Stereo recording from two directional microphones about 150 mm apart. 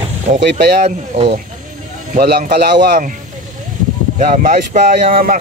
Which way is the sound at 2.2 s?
90° right.